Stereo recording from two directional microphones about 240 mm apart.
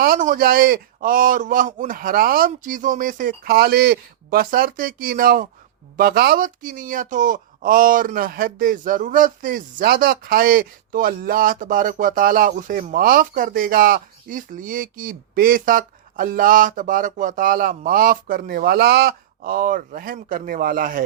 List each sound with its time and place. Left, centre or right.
0.0 s speech: right